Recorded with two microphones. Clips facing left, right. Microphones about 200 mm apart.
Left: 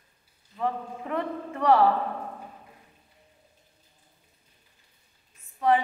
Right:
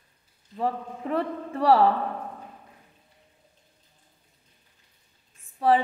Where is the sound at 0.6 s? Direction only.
30° right (ahead or behind).